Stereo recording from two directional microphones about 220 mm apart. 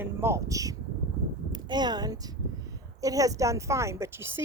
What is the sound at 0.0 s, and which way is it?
Speech, 10° right (ahead or behind).